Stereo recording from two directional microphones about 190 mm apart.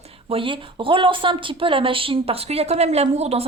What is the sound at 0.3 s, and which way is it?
Speech, 30° right (ahead or behind).